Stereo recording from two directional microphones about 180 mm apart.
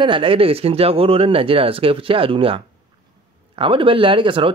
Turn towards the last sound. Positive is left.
turn(degrees=-30)  # may be behind; listen again after turning